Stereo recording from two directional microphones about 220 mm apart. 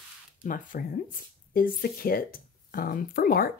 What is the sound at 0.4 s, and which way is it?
Speech, 40° left (ahead or behind).